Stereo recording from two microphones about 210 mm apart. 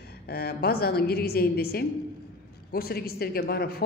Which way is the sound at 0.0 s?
50° left (ahead or behind).